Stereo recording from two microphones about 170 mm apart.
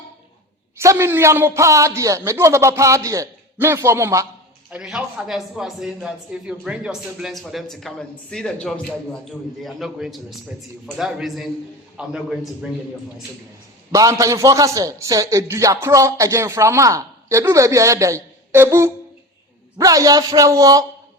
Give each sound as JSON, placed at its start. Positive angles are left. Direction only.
{"t": 0.8, "sound": "a man's voice", "side_deg": -15}
{"t": 4.7, "sound": "a man's voice", "side_deg": -5}
{"t": 13.9, "sound": "a man's voice", "side_deg": -20}